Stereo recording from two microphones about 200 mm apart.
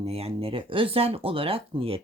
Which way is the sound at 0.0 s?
30° right (ahead or behind).